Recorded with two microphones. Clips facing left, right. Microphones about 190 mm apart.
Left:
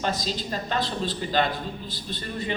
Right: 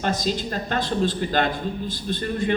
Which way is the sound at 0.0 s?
50° right (ahead or behind).